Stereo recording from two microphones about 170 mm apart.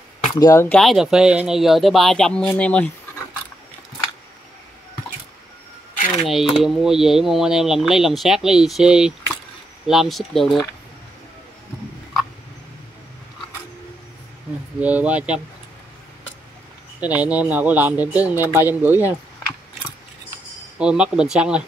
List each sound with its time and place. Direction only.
0.4 s speech: 15° left (ahead or behind)
0.7 s speech: centre (ahead or behind)
6.0 s speech: centre (ahead or behind)
14.8 s speech: 10° right (ahead or behind)
17.0 s speech: 10° right (ahead or behind)
20.7 s speech: 5° right (ahead or behind)